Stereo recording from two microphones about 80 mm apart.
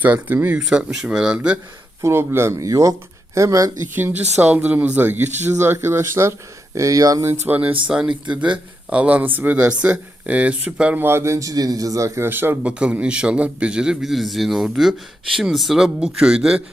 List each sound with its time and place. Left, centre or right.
0.0 s speech: right
0.6 s a man's voice: centre
2.0 s a man's voice: right
3.9 s a man's voice: right
7.3 s a man's voice: right
11.0 s a man's voice: right
12.3 s speech: right
12.6 s a man's voice: centre